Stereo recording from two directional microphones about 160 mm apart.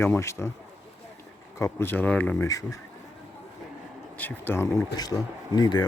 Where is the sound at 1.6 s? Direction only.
15° left (ahead or behind).